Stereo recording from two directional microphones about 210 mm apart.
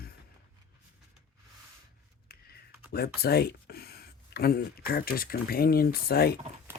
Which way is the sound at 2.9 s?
50° left (ahead or behind).